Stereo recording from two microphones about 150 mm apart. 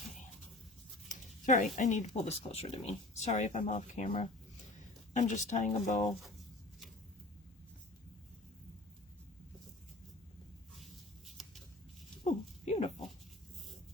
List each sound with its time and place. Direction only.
1.0 s a sound: 60° left (ahead or behind)
1.7 s speech: 50° left (ahead or behind)
11.3 s shuffling cards: centre (ahead or behind)
12.6 s goat: 40° left (ahead or behind)